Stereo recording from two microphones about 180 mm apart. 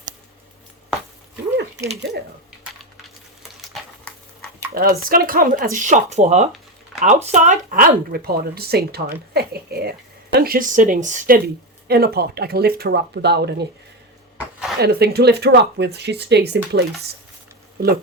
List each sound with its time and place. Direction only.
4.7 s speech: 55° right (ahead or behind)
11.4 s speech: 60° right (ahead or behind)
14.8 s speech: 65° right (ahead or behind)